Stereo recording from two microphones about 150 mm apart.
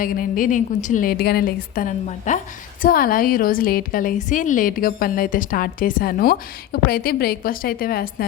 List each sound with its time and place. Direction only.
0.0 s a woman's voice: 65° left (ahead or behind)
2.0 s a woman's voice: 55° left (ahead or behind)
2.8 s a woman's voice: 70° left (ahead or behind)